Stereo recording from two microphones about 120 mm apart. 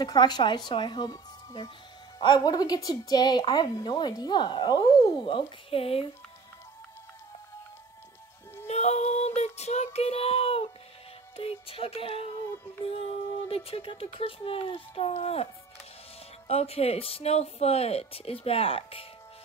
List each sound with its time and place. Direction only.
0.0 s a woman's voice: 35° left (ahead or behind)
5.2 s speech: 50° left (ahead or behind)
8.6 s music: 65° left (ahead or behind)
9.9 s child singing: 60° left (ahead or behind)
11.3 s speech: 50° left (ahead or behind)
16.4 s speech: 55° left (ahead or behind)